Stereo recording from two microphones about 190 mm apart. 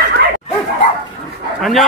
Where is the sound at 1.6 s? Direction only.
Centre (ahead or behind).